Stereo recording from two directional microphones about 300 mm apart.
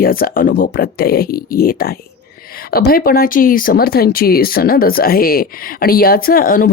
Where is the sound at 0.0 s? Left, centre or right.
Left.